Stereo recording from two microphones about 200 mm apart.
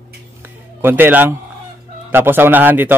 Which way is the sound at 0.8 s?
10° right (ahead or behind).